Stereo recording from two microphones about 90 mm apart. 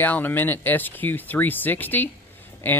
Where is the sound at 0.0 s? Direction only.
20° left (ahead or behind).